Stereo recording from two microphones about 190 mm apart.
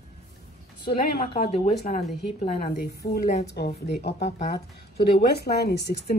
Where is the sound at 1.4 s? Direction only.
35° left (ahead or behind).